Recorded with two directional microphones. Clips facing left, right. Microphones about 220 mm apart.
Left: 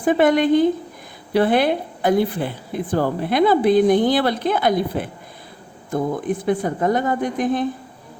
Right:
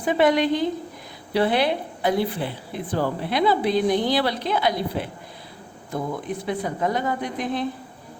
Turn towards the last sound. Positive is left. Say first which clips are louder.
# left 6 dB
turn(degrees=45)  # may be behind; listen again after turning